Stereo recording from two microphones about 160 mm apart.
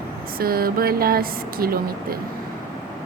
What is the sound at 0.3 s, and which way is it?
A woman's voice, 70° right (ahead or behind).